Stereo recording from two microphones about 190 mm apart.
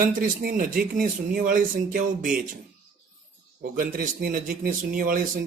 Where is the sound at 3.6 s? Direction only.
50° right (ahead or behind).